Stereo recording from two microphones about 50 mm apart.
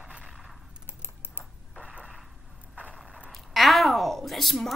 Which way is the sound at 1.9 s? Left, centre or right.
Right.